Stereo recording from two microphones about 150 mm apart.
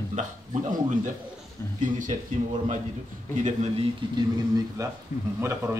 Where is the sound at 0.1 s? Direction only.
55° right (ahead or behind).